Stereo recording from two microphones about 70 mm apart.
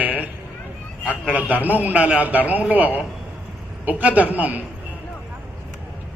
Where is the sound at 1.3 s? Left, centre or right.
Right.